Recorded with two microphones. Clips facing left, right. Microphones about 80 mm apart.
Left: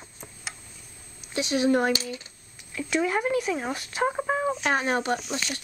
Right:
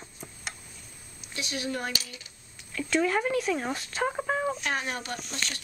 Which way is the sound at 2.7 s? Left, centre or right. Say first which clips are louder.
Even; centre.